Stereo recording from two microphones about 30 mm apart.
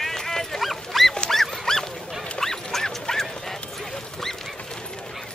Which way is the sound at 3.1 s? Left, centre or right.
Centre.